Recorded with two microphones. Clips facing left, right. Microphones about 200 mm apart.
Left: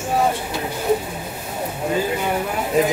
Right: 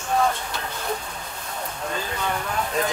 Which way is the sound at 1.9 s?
15° left (ahead or behind).